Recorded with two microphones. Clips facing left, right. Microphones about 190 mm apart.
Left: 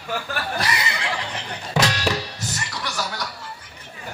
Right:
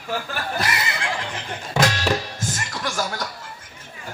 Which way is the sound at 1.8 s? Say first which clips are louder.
Right 1 dB; 50° right (ahead or behind).